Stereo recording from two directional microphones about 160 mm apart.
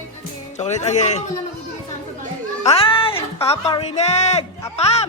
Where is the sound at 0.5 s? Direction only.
45° left (ahead or behind).